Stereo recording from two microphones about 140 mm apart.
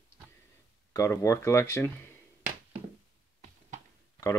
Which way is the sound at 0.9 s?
20° left (ahead or behind).